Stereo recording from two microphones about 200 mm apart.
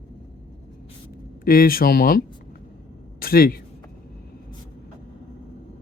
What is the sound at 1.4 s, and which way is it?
Speech, 45° left (ahead or behind).